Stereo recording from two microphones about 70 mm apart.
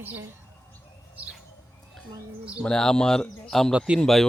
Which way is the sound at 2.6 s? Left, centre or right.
Centre.